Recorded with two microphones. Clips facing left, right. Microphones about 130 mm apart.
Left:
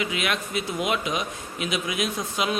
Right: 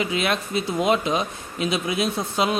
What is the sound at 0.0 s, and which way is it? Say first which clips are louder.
A man's voice: right 4 dB; 35° right (ahead or behind).